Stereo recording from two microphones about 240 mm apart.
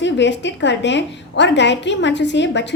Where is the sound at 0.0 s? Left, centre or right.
Left.